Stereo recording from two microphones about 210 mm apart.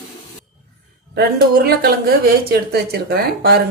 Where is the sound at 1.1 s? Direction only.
50° right (ahead or behind).